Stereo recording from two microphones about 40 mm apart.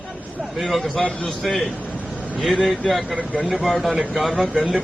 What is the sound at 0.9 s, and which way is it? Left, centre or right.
Speech, centre.